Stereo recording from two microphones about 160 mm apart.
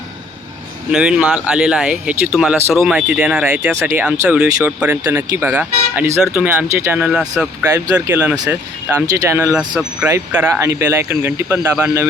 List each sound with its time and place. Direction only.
0.9 s speech: 5° right (ahead or behind)
9.1 s speech: 20° right (ahead or behind)
9.6 s speech: 5° right (ahead or behind)